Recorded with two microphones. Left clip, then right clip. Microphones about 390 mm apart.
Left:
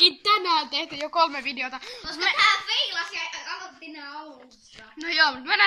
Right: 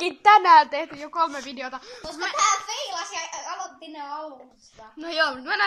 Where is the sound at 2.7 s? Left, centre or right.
Right.